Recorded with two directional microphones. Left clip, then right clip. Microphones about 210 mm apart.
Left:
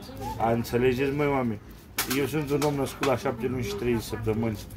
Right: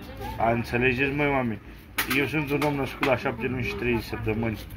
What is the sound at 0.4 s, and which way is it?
Speech, 10° left (ahead or behind).